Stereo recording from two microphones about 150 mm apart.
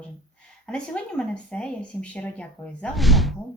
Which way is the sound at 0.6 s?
5° left (ahead or behind).